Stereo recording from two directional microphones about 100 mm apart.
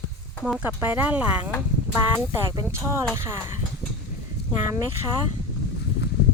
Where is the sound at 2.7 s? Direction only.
25° right (ahead or behind).